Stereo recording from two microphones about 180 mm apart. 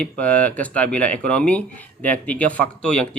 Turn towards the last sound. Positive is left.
turn(degrees=5)  # may be behind; listen again after turning